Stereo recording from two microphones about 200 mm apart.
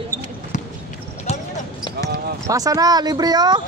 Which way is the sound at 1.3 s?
30° left (ahead or behind).